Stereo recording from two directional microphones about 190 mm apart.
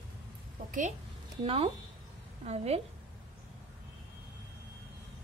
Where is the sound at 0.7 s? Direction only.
40° right (ahead or behind).